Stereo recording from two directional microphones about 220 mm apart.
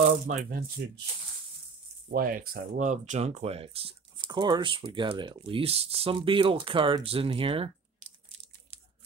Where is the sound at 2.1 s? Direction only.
40° right (ahead or behind); by 8.1 s 25° right (ahead or behind).